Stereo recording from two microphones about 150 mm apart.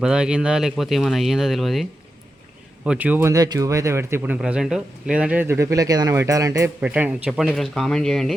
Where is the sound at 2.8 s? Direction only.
10° right (ahead or behind).